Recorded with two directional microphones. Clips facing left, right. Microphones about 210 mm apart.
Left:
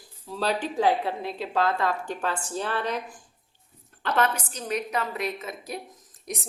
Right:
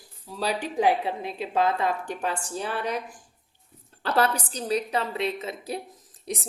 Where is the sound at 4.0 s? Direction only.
35° right (ahead or behind).